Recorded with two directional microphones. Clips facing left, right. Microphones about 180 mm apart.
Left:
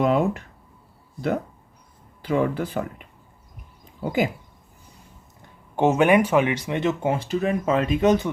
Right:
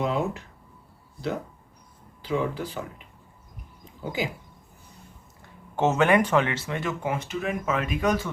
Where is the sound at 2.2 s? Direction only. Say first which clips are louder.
Left 5 dB; 55° left (ahead or behind).